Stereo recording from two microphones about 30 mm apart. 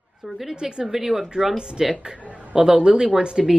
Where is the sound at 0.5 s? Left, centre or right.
Right.